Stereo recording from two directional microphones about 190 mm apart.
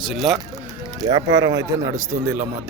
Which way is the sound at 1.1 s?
20° right (ahead or behind).